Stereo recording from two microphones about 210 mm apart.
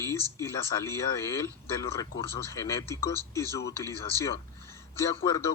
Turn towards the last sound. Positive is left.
turn(degrees=15)  # may be behind; listen again after turning